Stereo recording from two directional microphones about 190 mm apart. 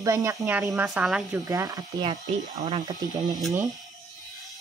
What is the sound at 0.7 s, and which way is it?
Speech, 5° right (ahead or behind).